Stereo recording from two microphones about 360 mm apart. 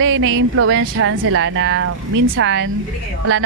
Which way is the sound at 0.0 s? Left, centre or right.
Right.